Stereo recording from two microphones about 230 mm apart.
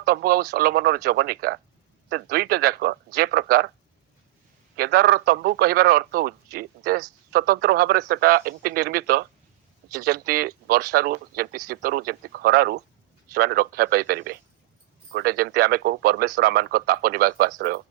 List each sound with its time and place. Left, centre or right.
0.0 s speech: right
4.8 s speech: right